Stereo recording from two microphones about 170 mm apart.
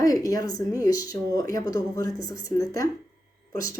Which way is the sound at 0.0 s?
20° left (ahead or behind).